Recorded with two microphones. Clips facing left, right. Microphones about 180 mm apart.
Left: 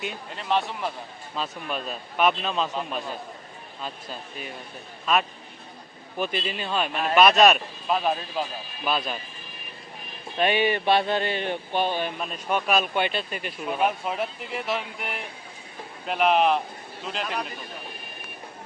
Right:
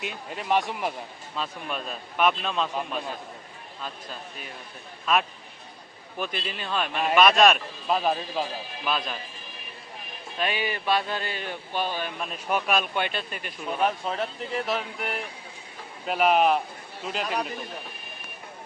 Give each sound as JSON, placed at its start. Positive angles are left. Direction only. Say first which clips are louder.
{"t": 0.0, "sound": "speech", "louder": "even", "side_deg": -5}
{"t": 1.4, "sound": "speech", "louder": "left 1 dB", "side_deg": 0}
{"t": 6.1, "sound": "speech", "louder": "left 4 dB", "side_deg": 5}
{"t": 10.4, "sound": "speech", "louder": "left 6 dB", "side_deg": 30}
{"t": 12.2, "sound": "speech", "louder": "left 1 dB", "side_deg": -5}